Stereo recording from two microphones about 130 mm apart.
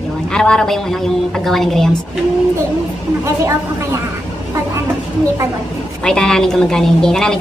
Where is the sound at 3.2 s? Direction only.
25° right (ahead or behind).